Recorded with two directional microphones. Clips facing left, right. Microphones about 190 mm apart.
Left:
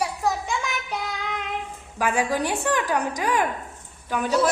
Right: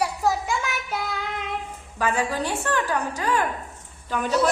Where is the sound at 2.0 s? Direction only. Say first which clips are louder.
Left 1 dB; 10° left (ahead or behind).